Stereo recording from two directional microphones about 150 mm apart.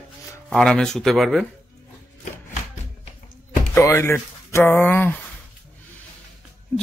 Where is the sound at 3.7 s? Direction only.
15° left (ahead or behind).